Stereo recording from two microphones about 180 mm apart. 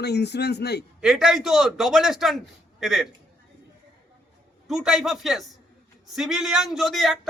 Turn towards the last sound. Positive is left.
turn(degrees=0)  # may be behind; listen again after turning